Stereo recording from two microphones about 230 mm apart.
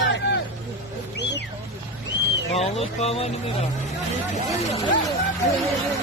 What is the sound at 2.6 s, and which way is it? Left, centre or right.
Speech, left.